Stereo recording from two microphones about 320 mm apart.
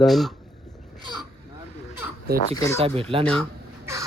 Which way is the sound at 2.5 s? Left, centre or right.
Centre.